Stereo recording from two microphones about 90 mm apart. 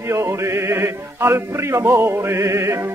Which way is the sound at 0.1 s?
30° right (ahead or behind).